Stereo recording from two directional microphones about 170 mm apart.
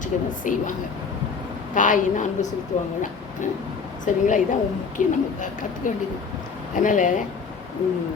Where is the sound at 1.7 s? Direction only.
50° left (ahead or behind).